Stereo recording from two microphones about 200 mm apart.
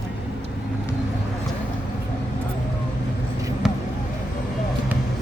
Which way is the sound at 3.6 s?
Centre (ahead or behind).